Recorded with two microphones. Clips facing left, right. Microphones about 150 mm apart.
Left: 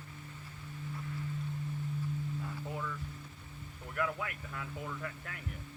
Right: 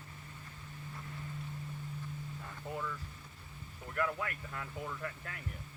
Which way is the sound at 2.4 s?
Centre (ahead or behind).